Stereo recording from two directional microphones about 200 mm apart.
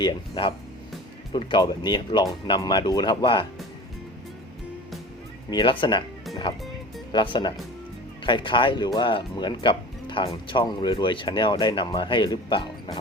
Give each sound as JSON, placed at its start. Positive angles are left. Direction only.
{"t": 0.0, "sound": "speech", "side_deg": 25}
{"t": 5.5, "sound": "speech", "side_deg": 20}